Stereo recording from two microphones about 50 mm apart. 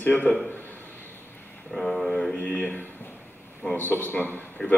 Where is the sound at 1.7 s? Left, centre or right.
Centre.